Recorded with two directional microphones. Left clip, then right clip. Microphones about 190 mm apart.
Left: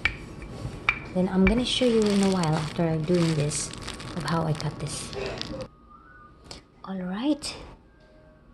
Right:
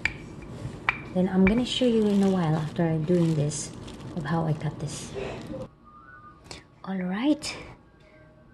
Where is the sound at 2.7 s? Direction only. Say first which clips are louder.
Even; 20° right (ahead or behind).